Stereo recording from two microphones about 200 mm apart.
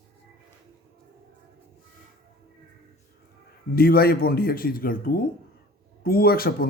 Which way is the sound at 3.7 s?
50° left (ahead or behind).